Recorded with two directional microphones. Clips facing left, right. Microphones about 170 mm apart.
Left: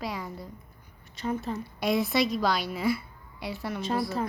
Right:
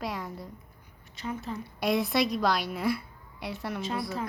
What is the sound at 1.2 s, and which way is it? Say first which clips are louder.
Speech: left 5 dB; 40° left (ahead or behind).